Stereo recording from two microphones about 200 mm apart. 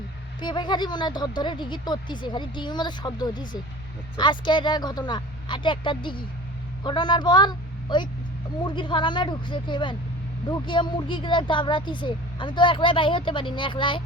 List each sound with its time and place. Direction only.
0.3 s speech: 20° left (ahead or behind)